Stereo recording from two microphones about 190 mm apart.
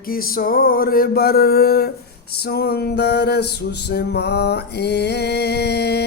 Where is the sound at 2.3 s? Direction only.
55° left (ahead or behind).